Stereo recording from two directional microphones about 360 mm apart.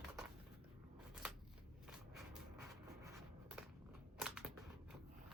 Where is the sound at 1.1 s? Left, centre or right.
Centre.